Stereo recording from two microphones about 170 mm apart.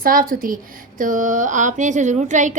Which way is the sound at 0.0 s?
55° right (ahead or behind).